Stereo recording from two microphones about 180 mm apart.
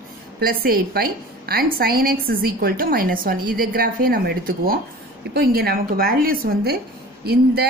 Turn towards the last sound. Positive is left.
turn(degrees=-60)  # may be behind; listen again after turning